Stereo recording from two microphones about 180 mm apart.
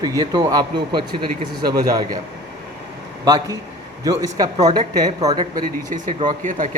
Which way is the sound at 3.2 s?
20° right (ahead or behind).